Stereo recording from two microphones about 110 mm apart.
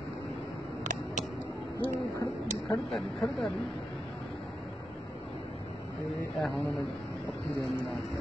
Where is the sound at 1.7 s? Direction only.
30° left (ahead or behind).